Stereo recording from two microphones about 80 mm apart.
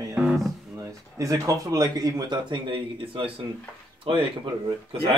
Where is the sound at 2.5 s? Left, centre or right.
Right.